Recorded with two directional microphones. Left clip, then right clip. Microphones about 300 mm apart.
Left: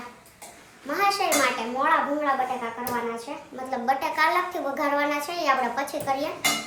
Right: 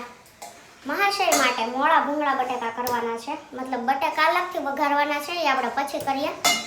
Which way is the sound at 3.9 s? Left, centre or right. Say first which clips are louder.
Right 2 dB; centre.